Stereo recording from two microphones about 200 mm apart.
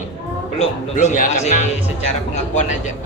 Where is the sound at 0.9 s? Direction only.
40° left (ahead or behind).